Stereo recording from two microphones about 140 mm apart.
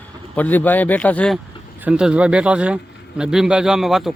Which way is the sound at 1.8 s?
5° right (ahead or behind).